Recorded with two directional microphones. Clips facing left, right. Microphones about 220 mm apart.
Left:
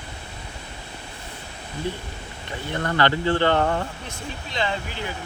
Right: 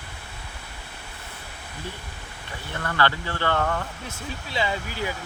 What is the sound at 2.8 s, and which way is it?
Speech, 20° left (ahead or behind).